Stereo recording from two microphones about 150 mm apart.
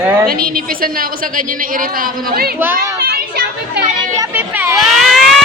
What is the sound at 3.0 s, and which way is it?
Children playing, 90° right.